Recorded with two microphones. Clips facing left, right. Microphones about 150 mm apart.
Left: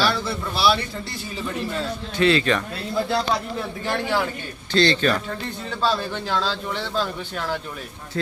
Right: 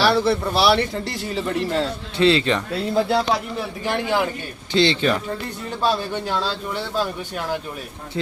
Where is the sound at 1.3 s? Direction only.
85° right.